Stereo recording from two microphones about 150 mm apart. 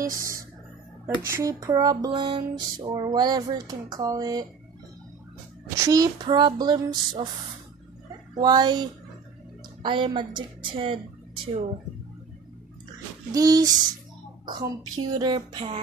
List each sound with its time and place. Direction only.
0.0 s music: 20° right (ahead or behind)
5.8 s music: 25° right (ahead or behind)
8.4 s music: 30° right (ahead or behind)
9.8 s speech: 35° right (ahead or behind)
13.3 s music: 25° right (ahead or behind)
14.4 s speech: 30° right (ahead or behind)